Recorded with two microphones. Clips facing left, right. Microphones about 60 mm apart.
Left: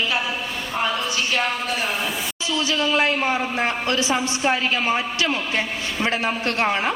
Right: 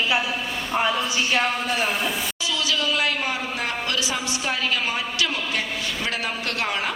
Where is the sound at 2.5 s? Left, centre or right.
Left.